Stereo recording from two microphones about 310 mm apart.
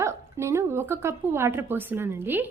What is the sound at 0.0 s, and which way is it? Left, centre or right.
A woman's voice, centre.